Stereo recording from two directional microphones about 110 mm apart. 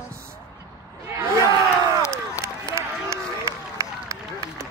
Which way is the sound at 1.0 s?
25° right (ahead or behind).